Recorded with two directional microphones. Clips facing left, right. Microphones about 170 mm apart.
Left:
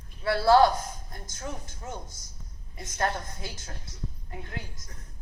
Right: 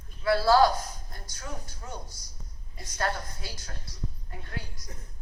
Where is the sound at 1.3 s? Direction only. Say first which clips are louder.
Left 3 dB; 25° left (ahead or behind).